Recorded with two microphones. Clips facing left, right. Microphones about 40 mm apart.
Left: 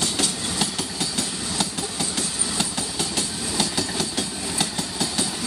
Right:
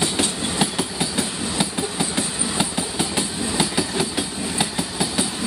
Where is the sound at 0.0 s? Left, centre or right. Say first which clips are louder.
Right 3 dB; centre.